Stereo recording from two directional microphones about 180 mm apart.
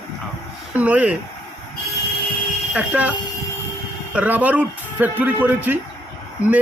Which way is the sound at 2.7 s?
10° right (ahead or behind).